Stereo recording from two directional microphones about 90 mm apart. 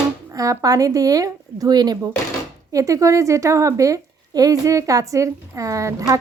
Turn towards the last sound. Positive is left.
turn(degrees=-35)  # may be behind; listen again after turning